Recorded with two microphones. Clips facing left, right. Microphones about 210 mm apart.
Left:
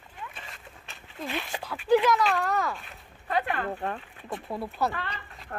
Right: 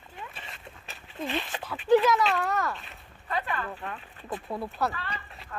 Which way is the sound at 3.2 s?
65° left (ahead or behind).